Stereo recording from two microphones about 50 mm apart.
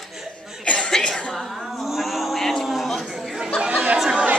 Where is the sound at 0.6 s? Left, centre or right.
Left.